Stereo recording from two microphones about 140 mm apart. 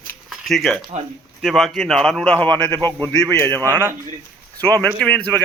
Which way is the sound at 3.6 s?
15° right (ahead or behind).